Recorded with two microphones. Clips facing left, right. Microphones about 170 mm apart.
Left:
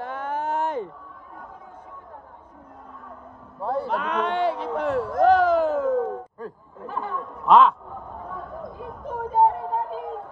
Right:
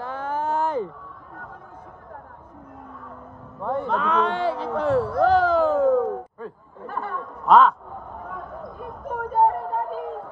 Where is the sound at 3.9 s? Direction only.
30° right (ahead or behind).